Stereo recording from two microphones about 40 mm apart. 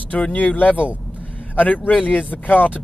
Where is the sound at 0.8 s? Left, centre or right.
Right.